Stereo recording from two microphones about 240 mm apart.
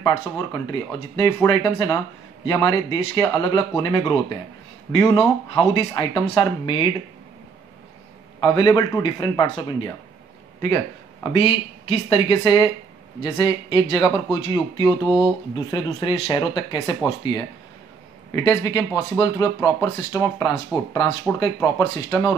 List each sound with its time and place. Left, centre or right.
0.0 s speech: centre
8.4 s speech: centre
11.2 s speech: left
16.0 s speech: centre